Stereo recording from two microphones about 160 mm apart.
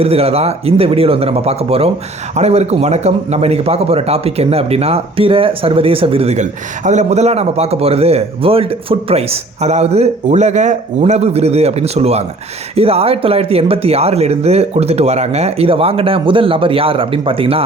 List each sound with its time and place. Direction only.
0.0 s speech: 40° right (ahead or behind)